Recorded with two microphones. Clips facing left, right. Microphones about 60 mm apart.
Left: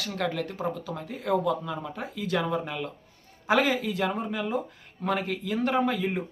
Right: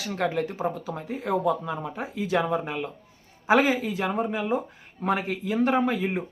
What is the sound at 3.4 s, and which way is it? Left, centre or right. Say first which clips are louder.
Speech: right 3 dB; centre.